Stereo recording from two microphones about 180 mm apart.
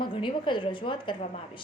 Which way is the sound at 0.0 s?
25° left (ahead or behind).